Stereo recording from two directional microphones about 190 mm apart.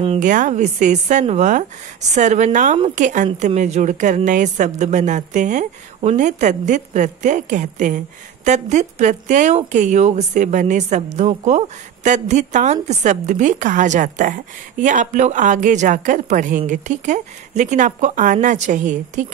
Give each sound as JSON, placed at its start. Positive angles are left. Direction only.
{"t": 0.0, "sound": "speech", "side_deg": -35}